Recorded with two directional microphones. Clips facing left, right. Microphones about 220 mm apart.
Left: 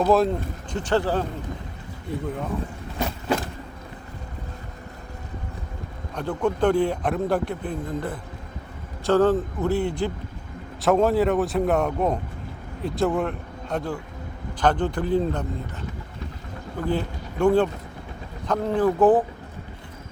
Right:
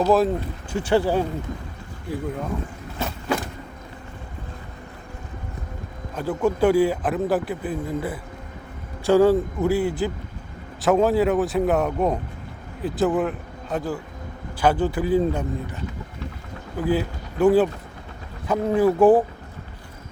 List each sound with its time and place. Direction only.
0.1 s a man's voice: 5° right (ahead or behind)
6.1 s a man's voice: 5° right (ahead or behind)
16.7 s speech: 5° right (ahead or behind)